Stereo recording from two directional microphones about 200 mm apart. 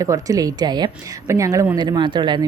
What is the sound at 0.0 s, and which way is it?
A woman's voice, 15° right (ahead or behind).